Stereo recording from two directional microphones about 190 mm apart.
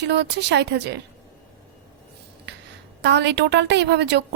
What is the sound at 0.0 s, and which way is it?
Speech, 65° right (ahead or behind).